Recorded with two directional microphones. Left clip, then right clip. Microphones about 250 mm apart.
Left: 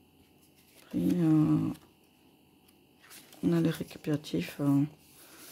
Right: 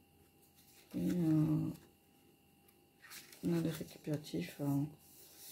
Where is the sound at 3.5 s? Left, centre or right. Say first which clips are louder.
Left 8 dB; left.